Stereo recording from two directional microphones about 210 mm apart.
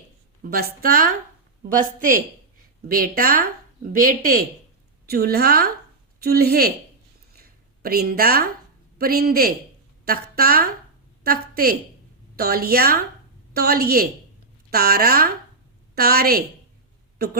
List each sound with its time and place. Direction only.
0.5 s a woman's voice: 45° right (ahead or behind)
7.3 s a sound: 45° right (ahead or behind)
9.0 s a woman's voice: 45° right (ahead or behind)